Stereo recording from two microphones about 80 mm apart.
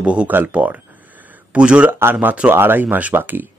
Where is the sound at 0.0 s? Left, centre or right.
Centre.